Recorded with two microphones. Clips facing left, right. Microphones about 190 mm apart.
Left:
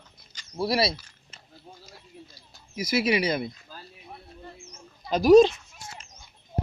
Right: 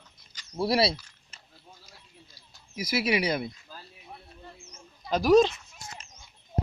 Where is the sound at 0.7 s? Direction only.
25° right (ahead or behind).